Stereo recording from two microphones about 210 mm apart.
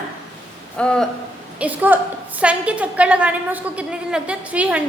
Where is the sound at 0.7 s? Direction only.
5° left (ahead or behind).